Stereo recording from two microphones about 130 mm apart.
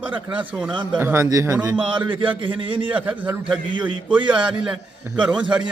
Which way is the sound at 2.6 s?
40° right (ahead or behind).